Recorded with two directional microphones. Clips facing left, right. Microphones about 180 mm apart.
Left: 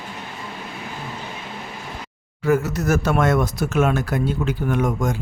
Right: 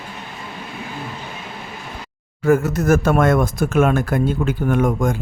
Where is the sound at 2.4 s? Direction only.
50° right (ahead or behind).